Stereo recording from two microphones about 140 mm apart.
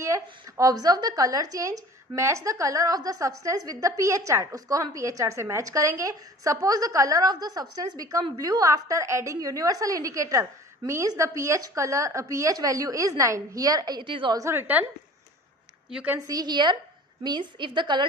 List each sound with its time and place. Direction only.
0.0 s speech: 25° right (ahead or behind)
14.4 s a woman's voice: 15° right (ahead or behind)
15.9 s a woman's voice: 10° right (ahead or behind)
16.2 s a woman's voice: 30° right (ahead or behind)